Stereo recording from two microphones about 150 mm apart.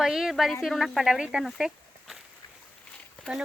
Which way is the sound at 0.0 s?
5° right (ahead or behind).